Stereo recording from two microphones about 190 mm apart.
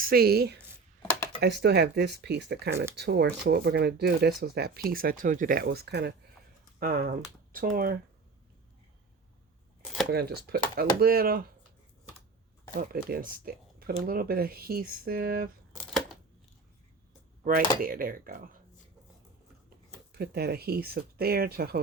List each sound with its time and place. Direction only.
0.0 s speech: 55° right (ahead or behind)
1.6 s speech: 60° right (ahead or behind)
5.6 s speech: 60° right (ahead or behind)
6.7 s speech: 50° right (ahead or behind)
10.1 s speech: 55° right (ahead or behind)
12.7 s speech: 50° right (ahead or behind)
17.4 s speech: 45° right (ahead or behind)
20.1 s speech: 55° right (ahead or behind)